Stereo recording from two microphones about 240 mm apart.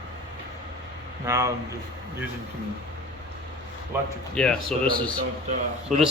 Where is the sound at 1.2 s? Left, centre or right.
Centre.